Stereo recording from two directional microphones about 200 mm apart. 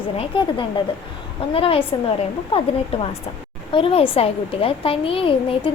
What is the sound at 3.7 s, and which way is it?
A child's voice, 25° left (ahead or behind).